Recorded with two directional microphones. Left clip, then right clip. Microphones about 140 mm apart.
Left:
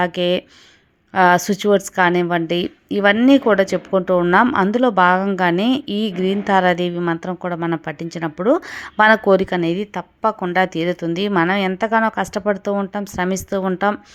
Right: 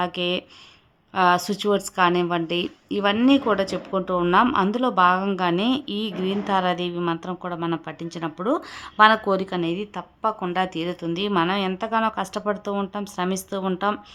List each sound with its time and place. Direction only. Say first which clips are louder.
0.0 s a woman's voice: left 6 dB; 30° left (ahead or behind)